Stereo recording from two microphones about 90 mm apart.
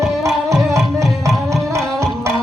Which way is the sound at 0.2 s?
35° right (ahead or behind).